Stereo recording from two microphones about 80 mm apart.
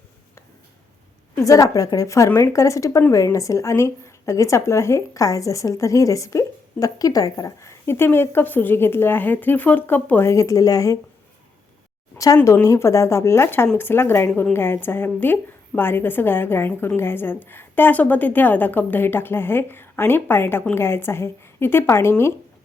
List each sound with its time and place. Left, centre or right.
1.5 s a woman's voice: left
10.2 s a woman's voice: left
12.1 s a woman's voice: left